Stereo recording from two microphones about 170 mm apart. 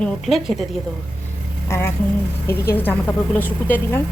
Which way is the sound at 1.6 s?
15° left (ahead or behind).